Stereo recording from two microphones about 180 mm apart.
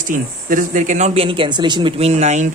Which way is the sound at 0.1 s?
50° right (ahead or behind).